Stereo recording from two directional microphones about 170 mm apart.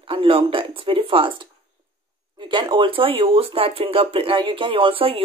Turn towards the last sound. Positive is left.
turn(degrees=-35)  # may be behind; listen again after turning